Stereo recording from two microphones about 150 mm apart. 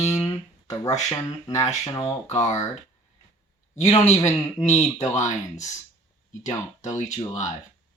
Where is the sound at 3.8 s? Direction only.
50° left (ahead or behind).